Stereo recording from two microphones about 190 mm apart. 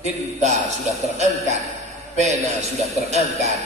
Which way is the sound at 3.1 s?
35° right (ahead or behind).